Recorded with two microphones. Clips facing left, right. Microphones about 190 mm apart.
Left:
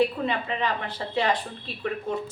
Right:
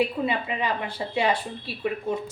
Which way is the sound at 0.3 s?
10° right (ahead or behind).